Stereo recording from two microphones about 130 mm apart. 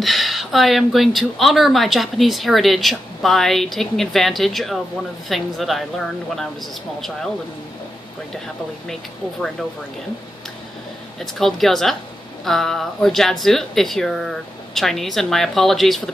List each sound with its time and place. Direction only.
0.0 s speech: centre (ahead or behind)
11.1 s speech: centre (ahead or behind)